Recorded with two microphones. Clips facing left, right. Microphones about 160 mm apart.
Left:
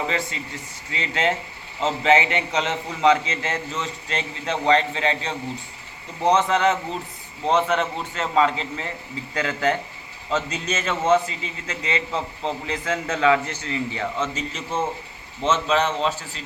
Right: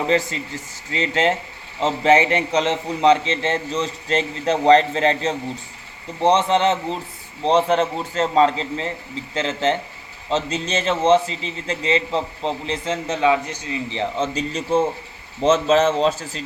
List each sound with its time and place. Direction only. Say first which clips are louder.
0.9 s a man's voice: right 4 dB; 35° right (ahead or behind)
6.2 s a man's voice: right 2 dB; 30° right (ahead or behind)